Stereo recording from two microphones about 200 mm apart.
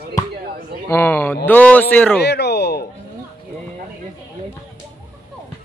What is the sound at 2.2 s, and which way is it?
Speech, 55° left (ahead or behind).